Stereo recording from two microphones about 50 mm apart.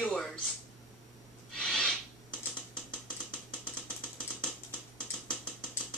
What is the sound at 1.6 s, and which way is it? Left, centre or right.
Owl, centre.